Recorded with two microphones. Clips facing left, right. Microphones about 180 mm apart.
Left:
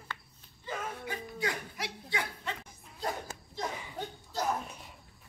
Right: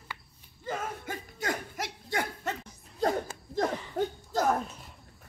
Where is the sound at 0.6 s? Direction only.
50° right (ahead or behind).